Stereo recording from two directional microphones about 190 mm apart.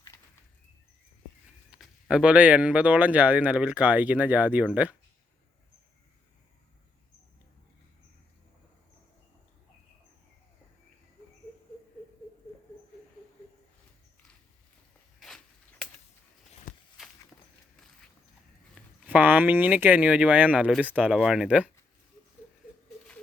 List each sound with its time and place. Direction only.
1.7 s speech: 5° right (ahead or behind)
16.7 s walk: 45° left (ahead or behind)
19.0 s speech: 10° right (ahead or behind)